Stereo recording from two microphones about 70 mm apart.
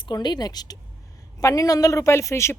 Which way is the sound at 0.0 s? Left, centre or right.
Left.